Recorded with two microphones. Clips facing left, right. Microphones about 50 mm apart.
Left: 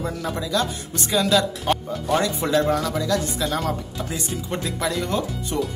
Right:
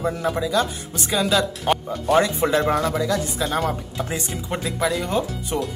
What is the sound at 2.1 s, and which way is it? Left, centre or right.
Speech, right.